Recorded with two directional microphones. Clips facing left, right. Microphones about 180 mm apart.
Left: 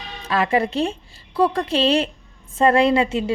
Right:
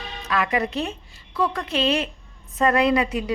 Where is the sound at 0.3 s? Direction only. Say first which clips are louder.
Left 4 dB; 30° left (ahead or behind).